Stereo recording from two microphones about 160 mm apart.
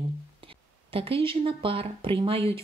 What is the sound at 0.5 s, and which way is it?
A woman's voice, 35° right (ahead or behind).